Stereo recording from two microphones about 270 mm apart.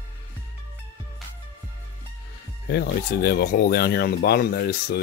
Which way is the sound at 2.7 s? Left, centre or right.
Left.